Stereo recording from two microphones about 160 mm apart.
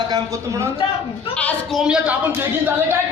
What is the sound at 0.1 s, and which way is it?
Speech, 20° right (ahead or behind).